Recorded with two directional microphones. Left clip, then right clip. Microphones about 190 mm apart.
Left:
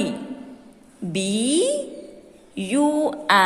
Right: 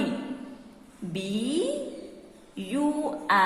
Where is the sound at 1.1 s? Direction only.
50° left (ahead or behind).